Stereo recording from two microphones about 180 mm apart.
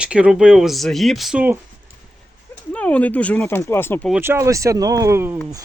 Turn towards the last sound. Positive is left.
turn(degrees=-15)  # may be behind; listen again after turning